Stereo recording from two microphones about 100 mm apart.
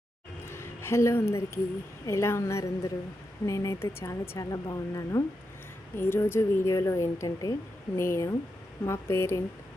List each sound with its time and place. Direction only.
0.4 s a sound: 25° left (ahead or behind)
2.0 s a woman's voice: 25° left (ahead or behind)
6.0 s a woman's voice: 25° left (ahead or behind)